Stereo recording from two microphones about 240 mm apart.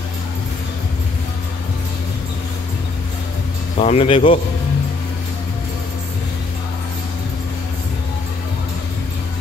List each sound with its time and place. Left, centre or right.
3.7 s speech: left